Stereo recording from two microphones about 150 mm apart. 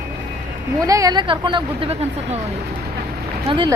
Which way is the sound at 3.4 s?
35° right (ahead or behind).